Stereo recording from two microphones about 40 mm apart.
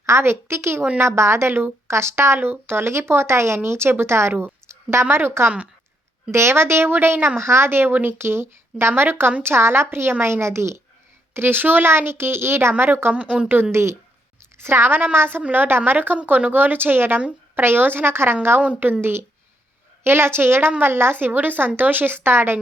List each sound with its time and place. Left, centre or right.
0.2 s a child's voice: right
9.4 s speech: right
11.3 s speech: right
11.9 s a child's voice: right
12.8 s speech: right
13.1 s a woman's voice: right
13.5 s speech: right
14.6 s speech: right
14.9 s speech: right
15.4 s a woman's voice: right
18.8 s speech: right
20.1 s speech: right